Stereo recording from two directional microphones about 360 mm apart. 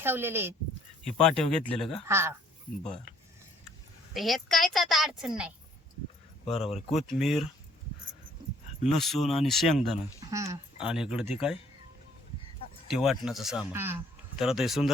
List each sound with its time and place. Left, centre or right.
0.0 s speech: centre
4.1 s speech: centre
6.4 s speech: centre
6.7 s speech: centre
8.9 s speech: centre
12.9 s speech: centre